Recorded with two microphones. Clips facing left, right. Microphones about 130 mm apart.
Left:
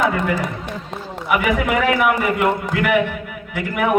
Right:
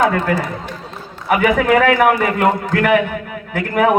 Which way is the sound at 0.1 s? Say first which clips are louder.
Right 3 dB; 45° right (ahead or behind).